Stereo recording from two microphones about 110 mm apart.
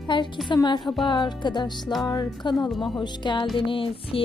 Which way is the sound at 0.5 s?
40° left (ahead or behind).